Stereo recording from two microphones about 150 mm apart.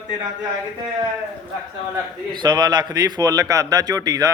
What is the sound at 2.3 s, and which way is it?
Speech, 30° right (ahead or behind).